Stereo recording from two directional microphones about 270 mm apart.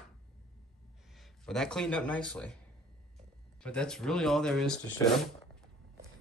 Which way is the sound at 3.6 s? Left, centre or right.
Centre.